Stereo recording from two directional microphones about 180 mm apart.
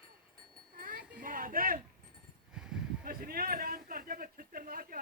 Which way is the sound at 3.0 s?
55° right (ahead or behind).